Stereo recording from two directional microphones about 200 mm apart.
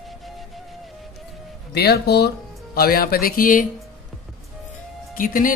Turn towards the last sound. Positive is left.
turn(degrees=45)  # may be behind; listen again after turning